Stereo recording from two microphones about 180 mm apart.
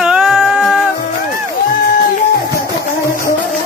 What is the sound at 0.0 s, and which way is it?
Music, 5° right (ahead or behind).